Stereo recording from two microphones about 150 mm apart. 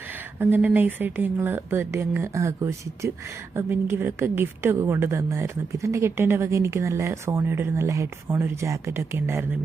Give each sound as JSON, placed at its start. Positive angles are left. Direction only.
{"t": 0.3, "sound": "a woman's voice", "side_deg": -10}